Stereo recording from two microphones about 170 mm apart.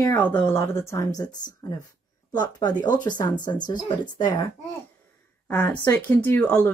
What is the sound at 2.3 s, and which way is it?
A woman's voice, 25° left (ahead or behind).